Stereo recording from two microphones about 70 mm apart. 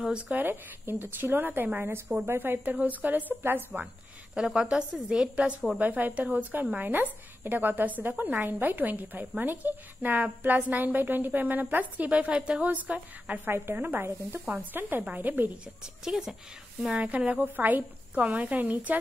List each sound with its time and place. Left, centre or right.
0.3 s a woman's voice: right
4.4 s a woman's voice: centre; by 15.5 s right
15.8 s a woman's voice: centre
16.8 s a woman's voice: centre